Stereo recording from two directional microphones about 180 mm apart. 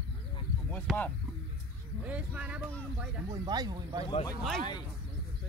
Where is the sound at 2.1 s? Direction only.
10° right (ahead or behind).